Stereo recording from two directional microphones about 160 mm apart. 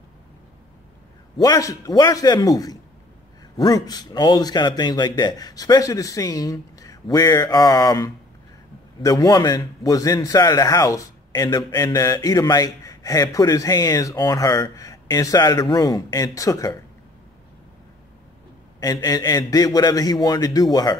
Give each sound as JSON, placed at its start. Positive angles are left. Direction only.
{"t": 1.4, "sound": "a man's voice", "side_deg": 20}
{"t": 18.8, "sound": "a man's voice", "side_deg": 20}